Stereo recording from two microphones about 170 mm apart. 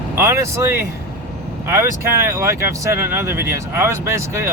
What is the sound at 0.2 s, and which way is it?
Speech, 15° right (ahead or behind).